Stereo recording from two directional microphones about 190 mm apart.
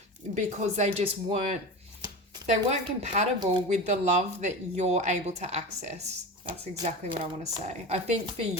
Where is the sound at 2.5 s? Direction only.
35° right (ahead or behind).